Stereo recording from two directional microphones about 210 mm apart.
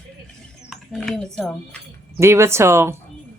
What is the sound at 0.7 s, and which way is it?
Speech, centre (ahead or behind).